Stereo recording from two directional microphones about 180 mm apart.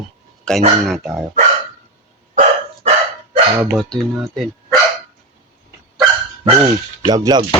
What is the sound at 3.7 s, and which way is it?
Speech, centre (ahead or behind).